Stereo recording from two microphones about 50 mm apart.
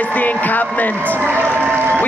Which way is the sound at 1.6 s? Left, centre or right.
Right.